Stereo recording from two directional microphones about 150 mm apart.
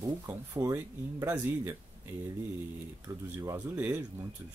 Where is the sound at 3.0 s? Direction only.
20° right (ahead or behind).